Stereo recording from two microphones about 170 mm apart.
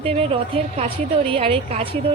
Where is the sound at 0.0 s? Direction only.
35° right (ahead or behind).